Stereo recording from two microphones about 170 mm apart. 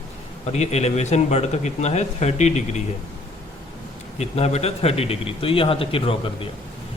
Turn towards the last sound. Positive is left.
turn(degrees=35)  # may be behind; listen again after turning